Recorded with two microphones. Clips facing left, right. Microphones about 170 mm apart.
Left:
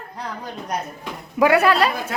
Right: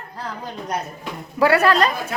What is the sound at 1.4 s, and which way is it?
Speech, 15° left (ahead or behind).